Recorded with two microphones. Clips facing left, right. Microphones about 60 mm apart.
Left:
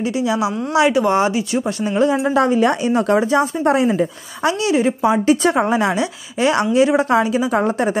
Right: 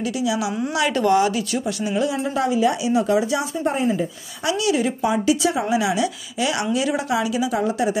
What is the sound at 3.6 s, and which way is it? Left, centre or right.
Speech, left.